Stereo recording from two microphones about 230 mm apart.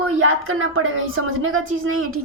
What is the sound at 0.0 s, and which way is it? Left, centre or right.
A woman's voice, right.